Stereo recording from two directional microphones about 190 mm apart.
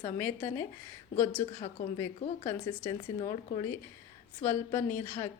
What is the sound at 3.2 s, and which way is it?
Speech, 30° left (ahead or behind).